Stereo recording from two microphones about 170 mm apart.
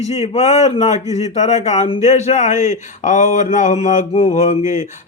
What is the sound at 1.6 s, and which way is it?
A man's voice, 40° left (ahead or behind).